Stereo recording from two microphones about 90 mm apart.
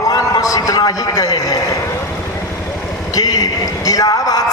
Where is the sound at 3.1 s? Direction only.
45° left (ahead or behind).